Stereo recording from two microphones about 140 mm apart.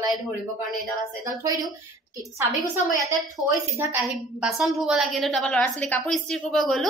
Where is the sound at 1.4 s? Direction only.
25° right (ahead or behind).